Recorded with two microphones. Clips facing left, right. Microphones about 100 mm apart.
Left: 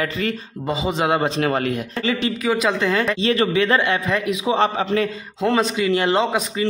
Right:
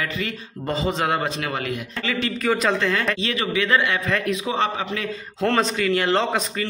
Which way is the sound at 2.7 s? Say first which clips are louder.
Left 3 dB; 15° left (ahead or behind).